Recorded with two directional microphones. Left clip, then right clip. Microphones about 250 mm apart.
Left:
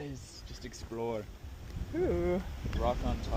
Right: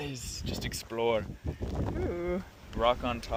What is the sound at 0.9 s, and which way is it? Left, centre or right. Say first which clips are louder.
Speech: right 8 dB; right.